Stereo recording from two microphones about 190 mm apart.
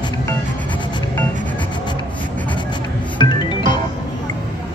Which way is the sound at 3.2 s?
25° left (ahead or behind).